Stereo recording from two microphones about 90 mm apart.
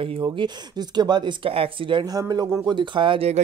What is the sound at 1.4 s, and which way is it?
Speech, 90° right.